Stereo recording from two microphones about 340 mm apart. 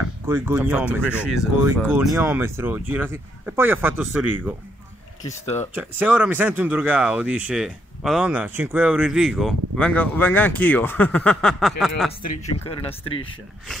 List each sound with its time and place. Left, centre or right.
0.3 s speech: centre
5.2 s speech: centre
5.8 s speech: centre
12.1 s speech: left